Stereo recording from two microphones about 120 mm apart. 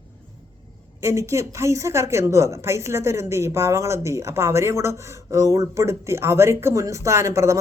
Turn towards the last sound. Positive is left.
turn(degrees=-25)  # may be behind; listen again after turning